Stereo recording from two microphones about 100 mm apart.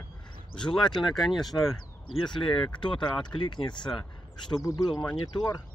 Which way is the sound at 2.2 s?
55° left (ahead or behind).